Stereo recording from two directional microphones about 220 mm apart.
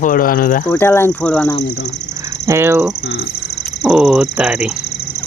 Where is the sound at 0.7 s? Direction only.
10° left (ahead or behind).